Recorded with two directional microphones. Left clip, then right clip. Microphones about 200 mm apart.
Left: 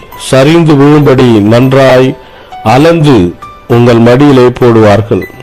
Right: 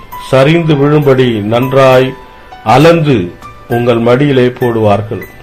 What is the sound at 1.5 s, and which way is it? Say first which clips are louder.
Speech: even; 60° left (ahead or behind).